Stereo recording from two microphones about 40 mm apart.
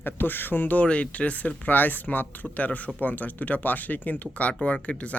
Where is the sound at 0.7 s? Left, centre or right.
Left.